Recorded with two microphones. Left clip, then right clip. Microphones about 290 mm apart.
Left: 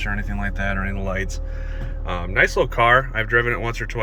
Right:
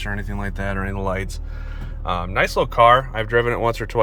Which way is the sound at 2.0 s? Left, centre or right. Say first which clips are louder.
Left 1 dB; centre.